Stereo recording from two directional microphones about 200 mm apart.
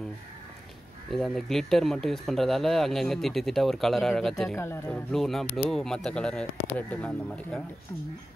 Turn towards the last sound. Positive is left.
turn(degrees=5)  # may be behind; listen again after turning